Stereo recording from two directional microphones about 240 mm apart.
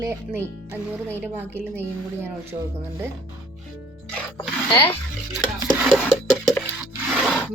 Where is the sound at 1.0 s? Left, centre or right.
Centre.